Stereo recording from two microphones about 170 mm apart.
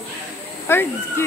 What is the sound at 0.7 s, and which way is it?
Speech, 15° left (ahead or behind).